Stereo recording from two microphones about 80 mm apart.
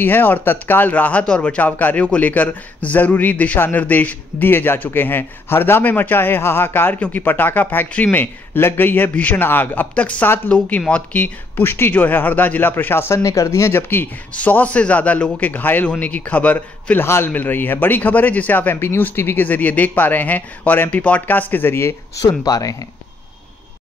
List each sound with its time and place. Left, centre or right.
0.0 s speech: left
14.3 s a man's voice: centre
22.4 s speech: left